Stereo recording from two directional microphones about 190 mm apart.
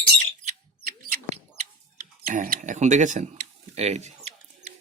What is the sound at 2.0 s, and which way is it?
Speech, 45° right (ahead or behind).